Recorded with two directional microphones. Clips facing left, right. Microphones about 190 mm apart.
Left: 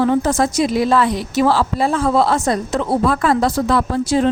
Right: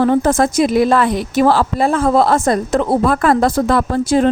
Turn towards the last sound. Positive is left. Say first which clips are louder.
# right 2 dB
turn(degrees=-50)  # may be behind; listen again after turning